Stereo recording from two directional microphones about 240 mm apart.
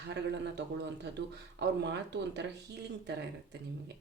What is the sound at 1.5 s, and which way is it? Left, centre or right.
Speech, right.